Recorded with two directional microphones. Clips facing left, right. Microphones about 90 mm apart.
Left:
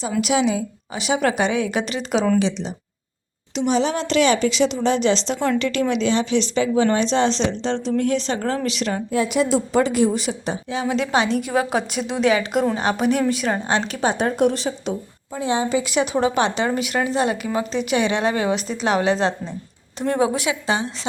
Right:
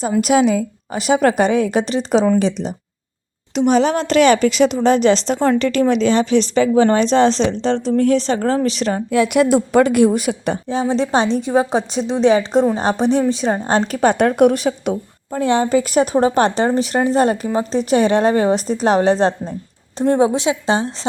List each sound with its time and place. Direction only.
0.2 s speech: 45° right (ahead or behind)
9.1 s speech: 65° right (ahead or behind)
10.7 s a woman's voice: 35° right (ahead or behind)
13.7 s a woman's voice: 40° right (ahead or behind)